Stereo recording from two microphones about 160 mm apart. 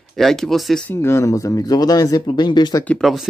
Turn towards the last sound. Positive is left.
turn(degrees=0)  # may be behind; listen again after turning